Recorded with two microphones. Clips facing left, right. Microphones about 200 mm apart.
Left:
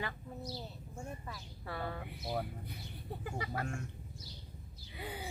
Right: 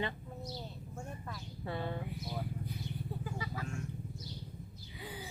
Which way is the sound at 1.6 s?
20° right (ahead or behind).